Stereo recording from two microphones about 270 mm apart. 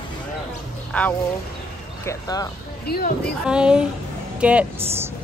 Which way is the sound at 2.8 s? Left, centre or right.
Left.